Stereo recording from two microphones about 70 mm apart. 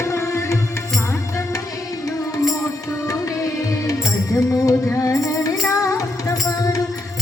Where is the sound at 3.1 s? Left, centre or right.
Left.